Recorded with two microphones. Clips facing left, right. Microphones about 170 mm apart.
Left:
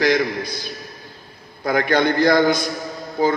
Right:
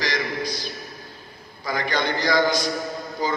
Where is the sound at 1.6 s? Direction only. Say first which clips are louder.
Left 7 dB; 55° left (ahead or behind).